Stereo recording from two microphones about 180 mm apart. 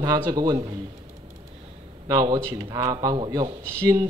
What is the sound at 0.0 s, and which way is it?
Speech, 20° right (ahead or behind).